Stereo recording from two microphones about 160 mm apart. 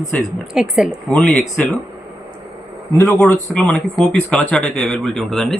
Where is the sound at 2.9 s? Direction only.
15° left (ahead or behind).